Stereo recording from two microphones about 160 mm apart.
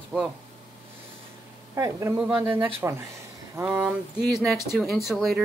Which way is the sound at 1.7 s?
20° right (ahead or behind).